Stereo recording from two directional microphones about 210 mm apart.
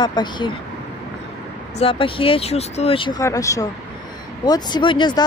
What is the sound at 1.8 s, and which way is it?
Speech, 25° left (ahead or behind).